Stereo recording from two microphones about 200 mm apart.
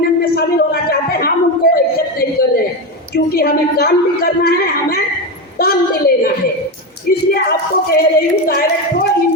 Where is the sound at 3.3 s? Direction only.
50° left (ahead or behind).